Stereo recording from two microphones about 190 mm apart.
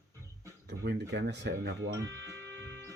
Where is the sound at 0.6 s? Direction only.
65° right (ahead or behind).